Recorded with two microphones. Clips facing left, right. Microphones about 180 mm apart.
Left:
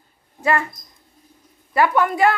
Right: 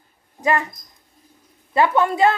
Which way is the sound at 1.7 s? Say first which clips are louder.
Even; 25° right (ahead or behind).